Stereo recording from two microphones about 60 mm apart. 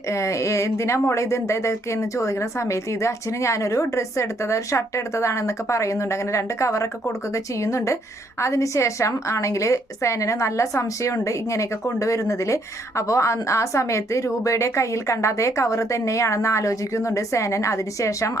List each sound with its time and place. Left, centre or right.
0.1 s a woman's voice: left